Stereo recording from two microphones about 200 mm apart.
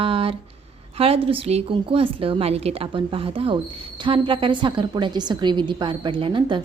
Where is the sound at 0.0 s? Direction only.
25° right (ahead or behind).